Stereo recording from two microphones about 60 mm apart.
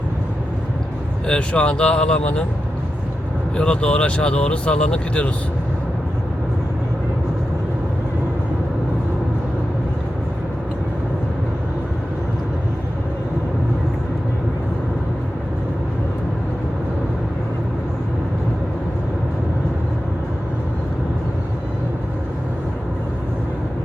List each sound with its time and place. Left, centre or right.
1.3 s speech: centre
3.6 s speech: centre